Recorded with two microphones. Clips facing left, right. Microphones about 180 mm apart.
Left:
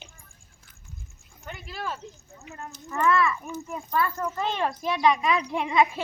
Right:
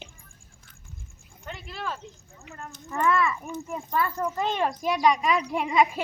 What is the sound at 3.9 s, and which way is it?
Speech, 20° right (ahead or behind).